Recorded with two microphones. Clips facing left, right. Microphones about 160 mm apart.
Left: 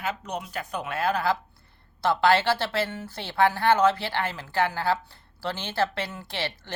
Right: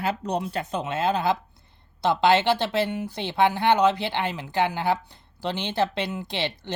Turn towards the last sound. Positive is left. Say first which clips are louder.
# right 3 dB
turn(degrees=-20)  # may be behind; listen again after turning